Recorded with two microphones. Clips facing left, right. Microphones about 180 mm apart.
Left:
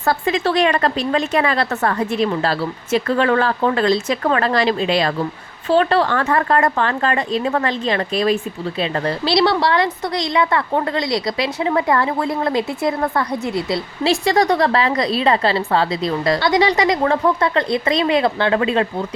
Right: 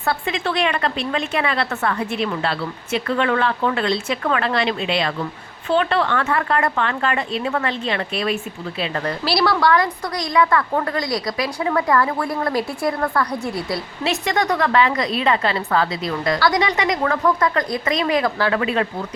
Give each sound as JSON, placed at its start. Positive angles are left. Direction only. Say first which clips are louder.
{"t": 0.0, "sound": "a woman's voice", "louder": "left 5 dB", "side_deg": 40}